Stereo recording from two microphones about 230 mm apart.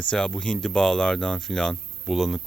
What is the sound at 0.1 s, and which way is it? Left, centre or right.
Speech, centre.